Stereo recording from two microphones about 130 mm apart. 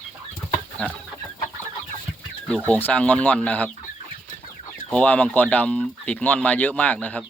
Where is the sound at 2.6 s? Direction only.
10° left (ahead or behind).